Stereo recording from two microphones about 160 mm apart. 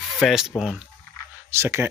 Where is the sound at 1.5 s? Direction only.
15° right (ahead or behind).